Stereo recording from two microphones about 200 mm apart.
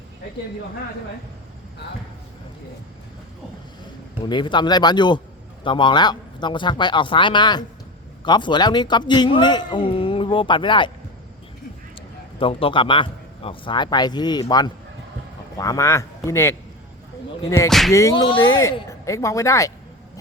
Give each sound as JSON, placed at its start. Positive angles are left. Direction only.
{"t": 4.3, "sound": "a man's voice", "side_deg": 20}
{"t": 12.4, "sound": "a man's voice", "side_deg": 25}
{"t": 17.7, "sound": "music", "side_deg": 0}
{"t": 17.9, "sound": "speech", "side_deg": 15}